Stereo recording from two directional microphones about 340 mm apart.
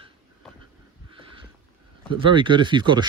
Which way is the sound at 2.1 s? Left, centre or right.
Centre.